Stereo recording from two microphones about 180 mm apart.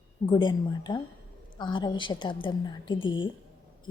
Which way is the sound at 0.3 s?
25° left (ahead or behind).